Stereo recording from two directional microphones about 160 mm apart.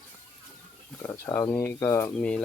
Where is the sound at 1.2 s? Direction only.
15° left (ahead or behind).